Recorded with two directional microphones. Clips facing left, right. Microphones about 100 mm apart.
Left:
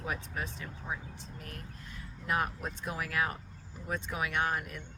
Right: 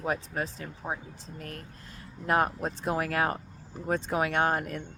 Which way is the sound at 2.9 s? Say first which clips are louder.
Right 5 dB; 50° right (ahead or behind).